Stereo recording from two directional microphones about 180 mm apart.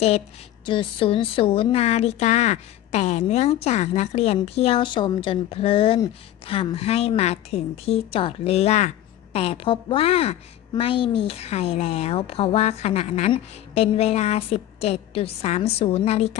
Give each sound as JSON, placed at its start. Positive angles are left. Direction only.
{"t": 0.6, "sound": "speech", "side_deg": 30}